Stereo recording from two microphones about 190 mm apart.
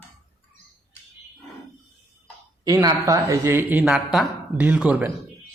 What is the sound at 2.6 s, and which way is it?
Speech, 20° right (ahead or behind).